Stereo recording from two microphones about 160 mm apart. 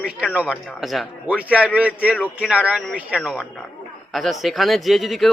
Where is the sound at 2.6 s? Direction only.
5° right (ahead or behind).